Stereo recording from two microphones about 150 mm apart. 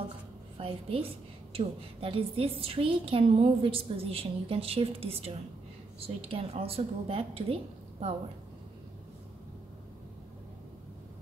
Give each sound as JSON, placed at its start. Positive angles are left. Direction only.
{"t": 0.6, "sound": "a woman's voice", "side_deg": -40}